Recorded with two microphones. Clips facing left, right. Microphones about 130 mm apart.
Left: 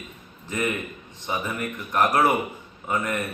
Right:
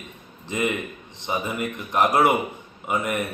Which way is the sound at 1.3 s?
20° right (ahead or behind).